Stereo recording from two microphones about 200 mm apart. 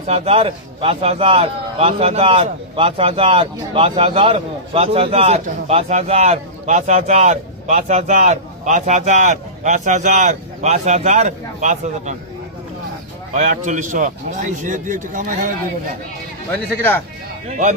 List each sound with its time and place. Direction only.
0.0 s a man's voice: 30° right (ahead or behind)
13.3 s a man's voice: 40° right (ahead or behind)
16.5 s a man's voice: 10° left (ahead or behind)